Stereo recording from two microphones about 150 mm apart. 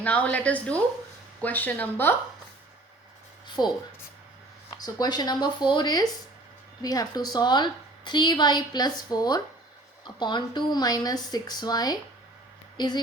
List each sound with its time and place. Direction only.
0.0 s a woman's voice: 10° left (ahead or behind)
3.4 s a sound: 30° left (ahead or behind)
4.8 s a woman's voice: 25° left (ahead or behind)